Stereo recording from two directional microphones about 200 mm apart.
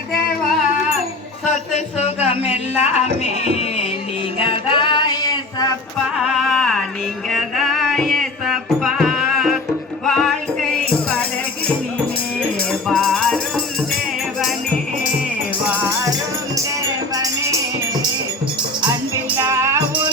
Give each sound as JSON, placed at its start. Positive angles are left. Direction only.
{"t": 2.2, "sound": "speech", "side_deg": 30}
{"t": 4.4, "sound": "music", "side_deg": 25}
{"t": 6.1, "sound": "a sound", "side_deg": 0}
{"t": 7.3, "sound": "music", "side_deg": 0}
{"t": 12.9, "sound": "music", "side_deg": 0}
{"t": 17.2, "sound": "music", "side_deg": -15}
{"t": 19.4, "sound": "music", "side_deg": -15}